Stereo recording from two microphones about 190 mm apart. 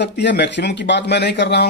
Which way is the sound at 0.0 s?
65° left (ahead or behind).